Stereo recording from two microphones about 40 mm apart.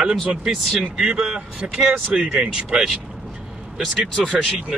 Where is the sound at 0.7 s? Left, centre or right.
Centre.